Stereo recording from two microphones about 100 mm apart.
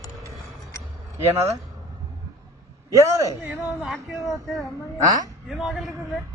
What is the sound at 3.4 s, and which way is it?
Speech, 15° right (ahead or behind).